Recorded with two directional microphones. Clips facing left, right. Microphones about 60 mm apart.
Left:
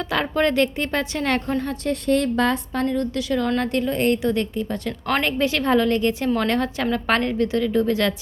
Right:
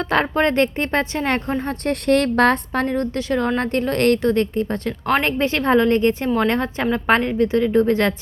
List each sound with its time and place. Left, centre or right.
0.0 s a woman's voice: right
1.7 s a woman's voice: right
2.8 s a woman's voice: right
3.8 s a woman's voice: right
4.2 s a woman's voice: right
4.9 s a woman's voice: centre
5.2 s a woman's voice: right
6.2 s a woman's voice: centre; by 8.1 s right